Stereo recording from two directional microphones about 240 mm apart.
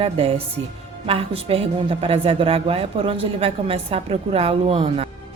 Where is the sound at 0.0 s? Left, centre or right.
Right.